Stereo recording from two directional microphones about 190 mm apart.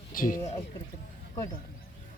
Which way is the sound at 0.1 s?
45° left (ahead or behind).